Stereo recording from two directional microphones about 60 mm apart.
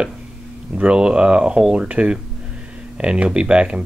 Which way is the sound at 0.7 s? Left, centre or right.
Centre.